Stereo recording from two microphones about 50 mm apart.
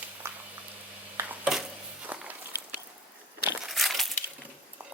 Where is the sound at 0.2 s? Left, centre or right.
Right.